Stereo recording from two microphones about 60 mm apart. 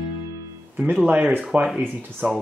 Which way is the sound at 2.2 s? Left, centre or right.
Right.